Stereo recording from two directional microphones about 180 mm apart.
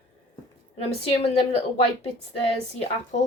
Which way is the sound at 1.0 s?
35° left (ahead or behind).